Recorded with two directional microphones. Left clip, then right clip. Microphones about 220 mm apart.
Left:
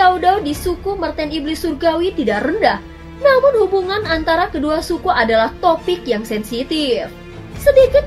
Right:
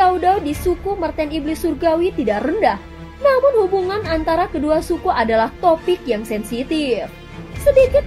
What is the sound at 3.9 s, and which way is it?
A woman's voice, 35° right (ahead or behind).